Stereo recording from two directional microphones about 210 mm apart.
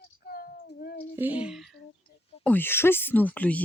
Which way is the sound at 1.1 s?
10° right (ahead or behind).